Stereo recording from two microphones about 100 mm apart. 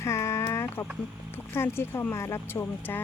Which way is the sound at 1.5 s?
25° left (ahead or behind).